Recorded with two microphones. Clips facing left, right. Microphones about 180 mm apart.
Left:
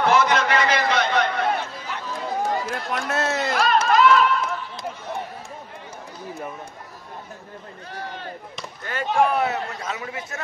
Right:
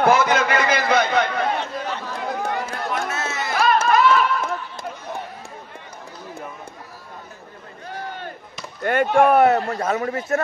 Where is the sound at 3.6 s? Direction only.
50° right (ahead or behind).